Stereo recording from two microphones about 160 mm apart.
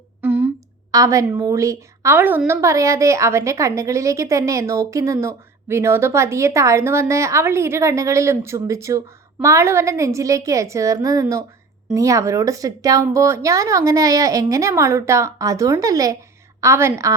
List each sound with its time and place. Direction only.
0.2 s a woman's voice: 10° right (ahead or behind)